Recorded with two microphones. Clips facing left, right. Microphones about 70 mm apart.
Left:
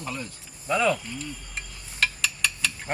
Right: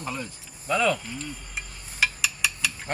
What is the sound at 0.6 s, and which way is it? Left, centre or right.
Speech, centre.